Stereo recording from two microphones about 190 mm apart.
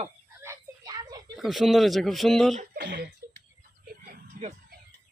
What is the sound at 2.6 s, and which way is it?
Speech, 45° right (ahead or behind).